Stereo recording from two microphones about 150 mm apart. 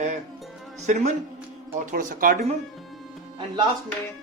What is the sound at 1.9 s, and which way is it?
Speech, 70° right (ahead or behind).